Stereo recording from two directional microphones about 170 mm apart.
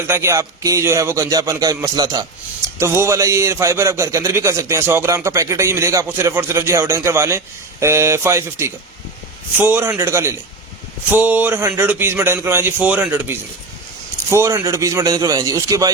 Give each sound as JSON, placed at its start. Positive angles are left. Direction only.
{"t": 0.1, "sound": "speech", "side_deg": -15}